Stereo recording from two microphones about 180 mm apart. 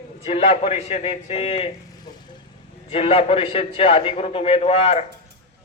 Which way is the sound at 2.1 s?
20° left (ahead or behind).